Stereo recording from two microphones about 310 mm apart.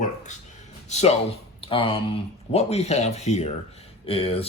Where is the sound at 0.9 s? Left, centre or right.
Left.